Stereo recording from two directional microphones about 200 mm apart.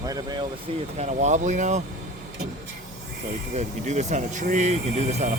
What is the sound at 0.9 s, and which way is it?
Speech, 35° right (ahead or behind).